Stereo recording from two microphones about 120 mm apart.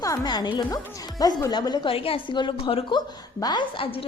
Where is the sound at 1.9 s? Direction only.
50° left (ahead or behind).